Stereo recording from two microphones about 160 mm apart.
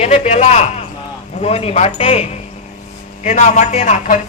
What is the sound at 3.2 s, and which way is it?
Speech, 45° left (ahead or behind).